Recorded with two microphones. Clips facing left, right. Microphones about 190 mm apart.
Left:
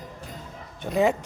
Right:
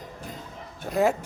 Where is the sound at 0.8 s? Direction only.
Centre (ahead or behind).